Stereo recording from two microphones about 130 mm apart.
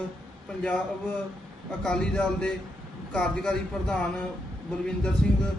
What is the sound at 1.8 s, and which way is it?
Speech, 10° left (ahead or behind).